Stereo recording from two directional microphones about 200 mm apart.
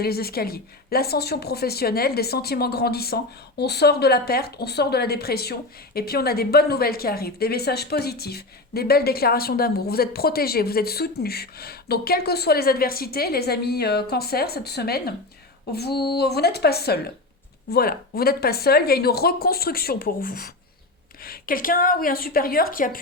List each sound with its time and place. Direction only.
0.0 s speech: 50° left (ahead or behind)